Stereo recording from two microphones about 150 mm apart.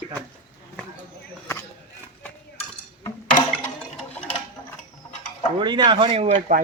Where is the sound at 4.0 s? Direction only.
10° left (ahead or behind).